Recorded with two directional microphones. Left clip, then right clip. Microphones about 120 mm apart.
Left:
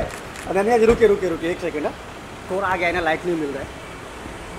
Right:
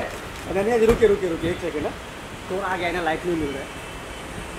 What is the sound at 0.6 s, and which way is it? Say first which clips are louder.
Speech: left 3 dB; 40° left (ahead or behind).